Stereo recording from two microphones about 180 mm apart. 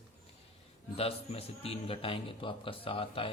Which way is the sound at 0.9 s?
35° left (ahead or behind).